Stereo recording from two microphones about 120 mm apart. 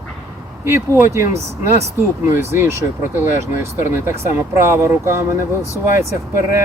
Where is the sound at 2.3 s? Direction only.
20° right (ahead or behind).